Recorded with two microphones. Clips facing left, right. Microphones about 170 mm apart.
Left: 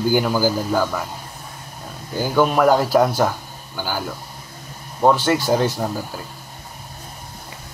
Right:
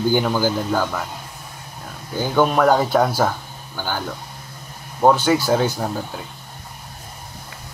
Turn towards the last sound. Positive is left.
turn(degrees=5)  # may be behind; listen again after turning